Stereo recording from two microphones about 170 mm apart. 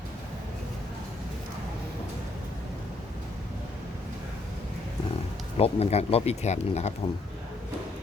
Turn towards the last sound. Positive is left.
turn(degrees=40)  # may be behind; listen again after turning